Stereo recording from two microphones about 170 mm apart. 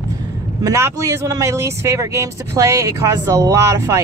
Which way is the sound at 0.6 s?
15° right (ahead or behind).